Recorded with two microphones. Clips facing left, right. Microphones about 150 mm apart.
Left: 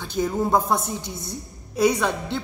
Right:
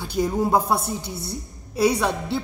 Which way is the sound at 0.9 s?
35° right (ahead or behind).